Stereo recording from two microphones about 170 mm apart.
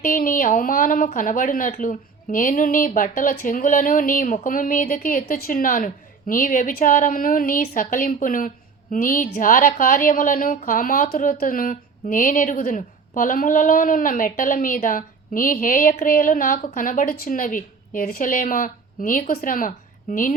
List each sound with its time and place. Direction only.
0.0 s a woman's voice: 55° left (ahead or behind)